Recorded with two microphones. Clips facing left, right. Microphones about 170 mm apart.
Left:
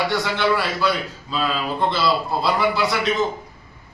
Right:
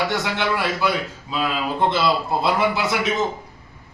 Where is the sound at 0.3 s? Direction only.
20° right (ahead or behind).